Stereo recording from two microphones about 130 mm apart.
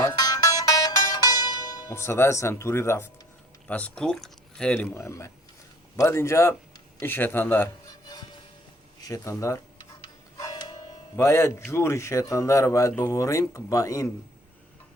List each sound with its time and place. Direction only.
0.2 s music: 30° left (ahead or behind)
3.7 s speech: 10° left (ahead or behind)
4.9 s a man's voice: 20° left (ahead or behind)
7.9 s music: 30° left (ahead or behind)
9.0 s a sound: 25° left (ahead or behind)
11.2 s a man's voice: 20° left (ahead or behind)